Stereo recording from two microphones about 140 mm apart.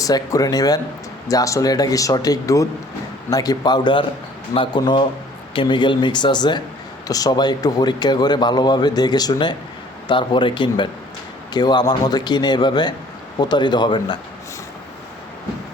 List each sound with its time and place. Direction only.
0.0 s a man's voice: 25° left (ahead or behind)